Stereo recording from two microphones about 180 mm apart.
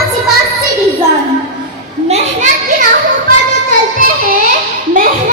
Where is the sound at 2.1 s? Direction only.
40° right (ahead or behind).